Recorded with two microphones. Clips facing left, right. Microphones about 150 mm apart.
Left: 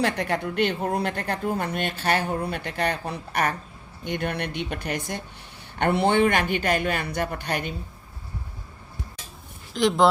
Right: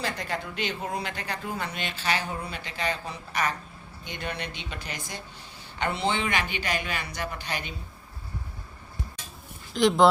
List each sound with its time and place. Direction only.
0.0 s a woman's voice: 65° left (ahead or behind)
9.7 s speech: centre (ahead or behind)